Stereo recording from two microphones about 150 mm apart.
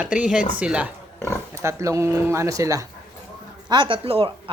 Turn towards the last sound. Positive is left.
turn(degrees=-35)  # may be behind; listen again after turning